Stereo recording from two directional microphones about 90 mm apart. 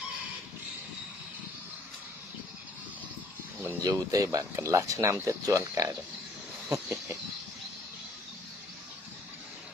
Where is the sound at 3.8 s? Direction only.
45° right (ahead or behind).